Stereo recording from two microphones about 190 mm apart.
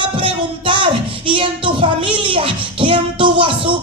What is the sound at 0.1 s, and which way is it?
Music, 25° right (ahead or behind).